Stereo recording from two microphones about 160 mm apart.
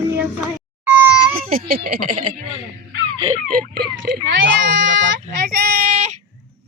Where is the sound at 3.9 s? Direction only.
60° right (ahead or behind).